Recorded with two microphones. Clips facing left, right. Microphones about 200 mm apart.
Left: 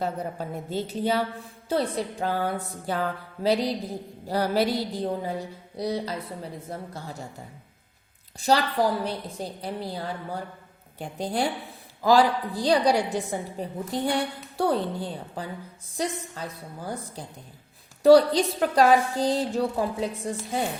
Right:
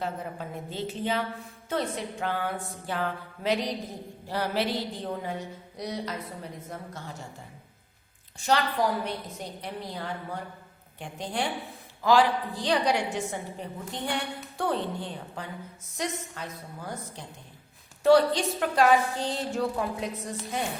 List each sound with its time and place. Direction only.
0.0 s a woman's voice: 40° left (ahead or behind)
8.4 s a woman's voice: 35° left (ahead or behind)